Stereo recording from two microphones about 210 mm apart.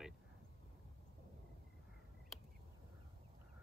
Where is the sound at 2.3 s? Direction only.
Centre (ahead or behind).